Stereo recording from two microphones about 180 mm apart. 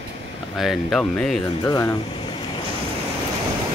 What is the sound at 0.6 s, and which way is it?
Speech, centre (ahead or behind).